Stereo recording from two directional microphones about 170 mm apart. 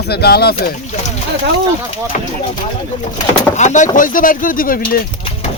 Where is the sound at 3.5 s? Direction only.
45° left (ahead or behind).